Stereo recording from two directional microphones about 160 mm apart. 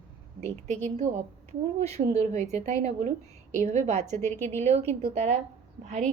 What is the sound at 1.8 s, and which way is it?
A woman's voice, 45° right (ahead or behind).